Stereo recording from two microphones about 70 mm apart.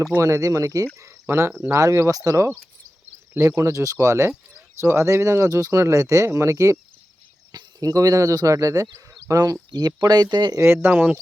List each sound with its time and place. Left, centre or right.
0.2 s speech: right
3.3 s speech: right
7.5 s speech: right
9.3 s speech: right
10.8 s speech: right